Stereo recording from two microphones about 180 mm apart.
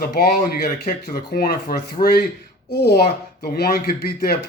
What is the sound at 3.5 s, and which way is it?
Speech, 60° left (ahead or behind).